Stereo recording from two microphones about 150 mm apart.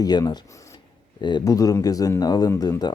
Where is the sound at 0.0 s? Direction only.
25° left (ahead or behind).